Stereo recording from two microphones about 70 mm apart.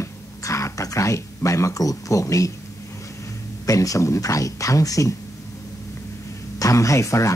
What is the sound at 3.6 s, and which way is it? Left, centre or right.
Speech, left.